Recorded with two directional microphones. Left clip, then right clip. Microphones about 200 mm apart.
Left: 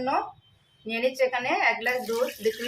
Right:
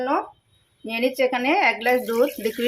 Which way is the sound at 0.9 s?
35° right (ahead or behind).